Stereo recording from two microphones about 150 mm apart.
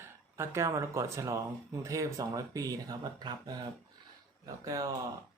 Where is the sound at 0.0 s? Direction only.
20° right (ahead or behind).